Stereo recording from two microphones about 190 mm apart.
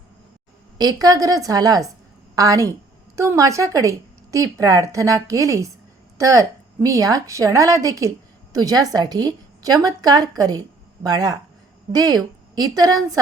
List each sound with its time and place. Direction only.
1.0 s a woman's voice: 20° right (ahead or behind)